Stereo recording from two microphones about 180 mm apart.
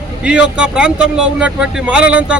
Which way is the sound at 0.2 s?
5° right (ahead or behind).